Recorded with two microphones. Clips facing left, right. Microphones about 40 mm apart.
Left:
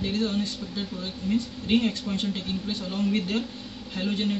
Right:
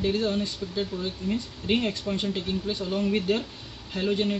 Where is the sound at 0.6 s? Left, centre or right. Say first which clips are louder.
Right 2 dB; centre.